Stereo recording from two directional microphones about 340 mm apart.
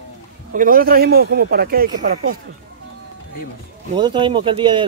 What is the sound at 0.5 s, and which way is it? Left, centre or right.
Speech, right.